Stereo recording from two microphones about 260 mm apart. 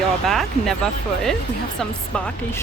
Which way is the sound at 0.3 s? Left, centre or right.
Centre.